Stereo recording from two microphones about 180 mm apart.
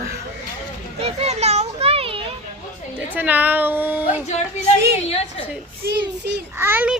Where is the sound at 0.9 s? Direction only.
35° right (ahead or behind).